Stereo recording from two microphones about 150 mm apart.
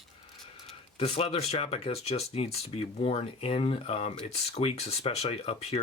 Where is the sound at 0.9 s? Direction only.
40° left (ahead or behind).